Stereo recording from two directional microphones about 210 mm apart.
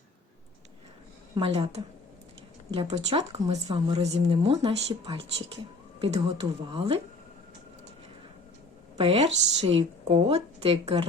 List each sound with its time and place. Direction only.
1.4 s a woman's voice: 25° right (ahead or behind)
9.0 s a woman's voice: 30° right (ahead or behind)